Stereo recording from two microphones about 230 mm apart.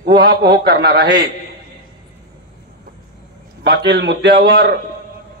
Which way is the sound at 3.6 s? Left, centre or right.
Right.